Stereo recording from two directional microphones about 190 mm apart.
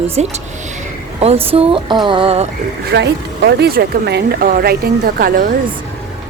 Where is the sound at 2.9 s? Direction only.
65° right (ahead or behind).